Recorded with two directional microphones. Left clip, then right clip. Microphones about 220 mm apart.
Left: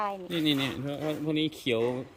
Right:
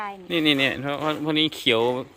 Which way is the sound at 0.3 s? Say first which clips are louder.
Right 12 dB; 5° left (ahead or behind).